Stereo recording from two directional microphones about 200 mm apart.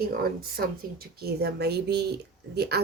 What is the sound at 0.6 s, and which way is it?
Speech, 50° right (ahead or behind).